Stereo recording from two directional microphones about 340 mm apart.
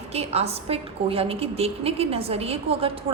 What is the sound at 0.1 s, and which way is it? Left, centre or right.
A woman's voice, centre.